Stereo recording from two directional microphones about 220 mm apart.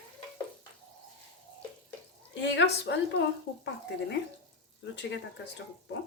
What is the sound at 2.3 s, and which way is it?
Speech, 55° left (ahead or behind).